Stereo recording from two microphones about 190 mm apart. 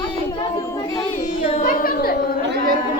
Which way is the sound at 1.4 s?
30° left (ahead or behind).